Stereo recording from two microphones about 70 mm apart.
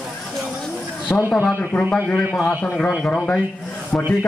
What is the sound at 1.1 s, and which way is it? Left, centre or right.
Speech, left.